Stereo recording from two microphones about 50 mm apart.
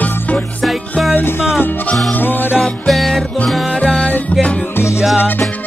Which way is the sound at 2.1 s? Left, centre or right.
Left.